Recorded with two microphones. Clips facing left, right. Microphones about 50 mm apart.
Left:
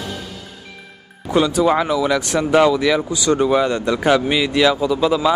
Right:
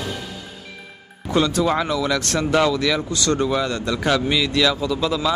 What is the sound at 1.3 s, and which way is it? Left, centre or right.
Speech, centre.